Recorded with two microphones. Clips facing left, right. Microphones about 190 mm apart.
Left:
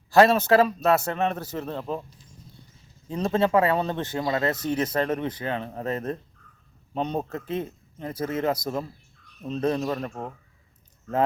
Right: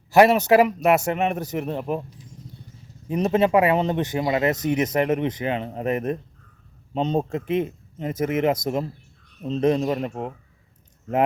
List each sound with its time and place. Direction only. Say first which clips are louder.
0.1 s a man's voice: right 2 dB; 15° right (ahead or behind)
3.1 s a man's voice: right 3 dB; 20° right (ahead or behind)